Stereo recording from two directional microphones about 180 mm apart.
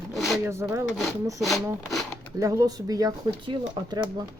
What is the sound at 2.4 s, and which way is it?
Speech, 20° right (ahead or behind).